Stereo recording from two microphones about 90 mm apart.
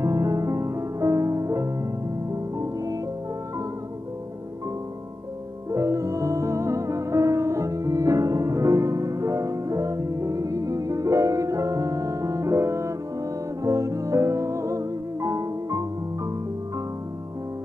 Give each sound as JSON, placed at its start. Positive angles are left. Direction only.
{"t": 0.0, "sound": "music", "side_deg": -40}
{"t": 5.7, "sound": "music", "side_deg": -35}